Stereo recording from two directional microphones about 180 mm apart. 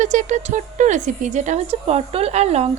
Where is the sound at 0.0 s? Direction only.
40° right (ahead or behind).